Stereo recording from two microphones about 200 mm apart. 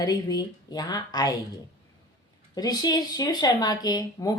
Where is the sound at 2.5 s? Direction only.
20° left (ahead or behind).